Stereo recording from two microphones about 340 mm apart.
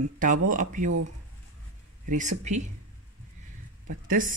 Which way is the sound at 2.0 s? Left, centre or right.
Right.